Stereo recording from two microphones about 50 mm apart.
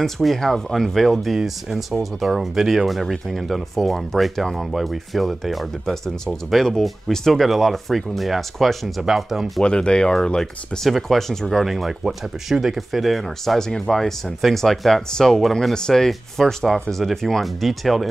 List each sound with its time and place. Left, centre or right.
0.0 s speech: centre
1.3 s speech: centre
9.6 s speech: centre
11.6 s speech: centre